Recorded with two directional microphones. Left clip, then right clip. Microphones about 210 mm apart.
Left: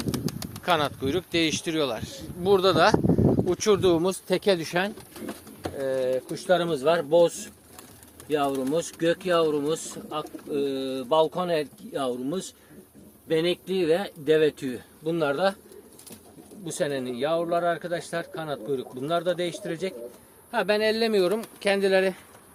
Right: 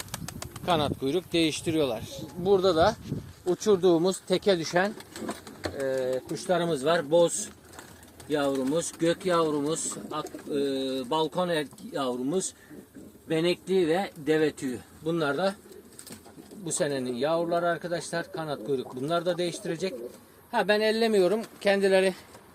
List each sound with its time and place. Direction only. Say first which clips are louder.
0.1 s pigeon: left 7 dB; 5° left (ahead or behind)
0.6 s speech: left 2 dB; centre (ahead or behind)
3.7 s speech: even; 20° left (ahead or behind)
4.0 s speech: left 1 dB; 5° left (ahead or behind)
16.6 s speech: left 1 dB; centre (ahead or behind)